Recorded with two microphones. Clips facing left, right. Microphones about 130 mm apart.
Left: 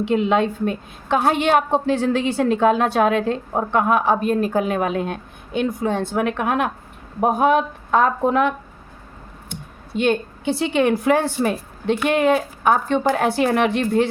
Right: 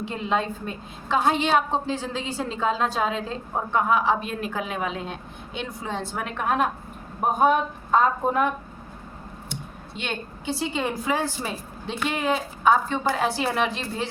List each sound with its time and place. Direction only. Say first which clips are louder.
0.0 s a woman's voice: left 8 dB; 70° left (ahead or behind)
7.2 s speech: left 4 dB; 80° left
10.0 s a woman's voice: left 13 dB; 55° left (ahead or behind)